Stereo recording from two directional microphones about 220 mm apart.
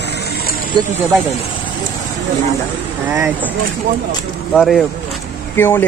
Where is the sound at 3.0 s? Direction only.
5° right (ahead or behind).